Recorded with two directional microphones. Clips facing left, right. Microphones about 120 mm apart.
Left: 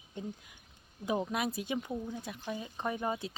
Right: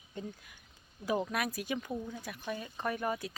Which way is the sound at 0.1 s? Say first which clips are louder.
Left 1 dB; 15° left (ahead or behind).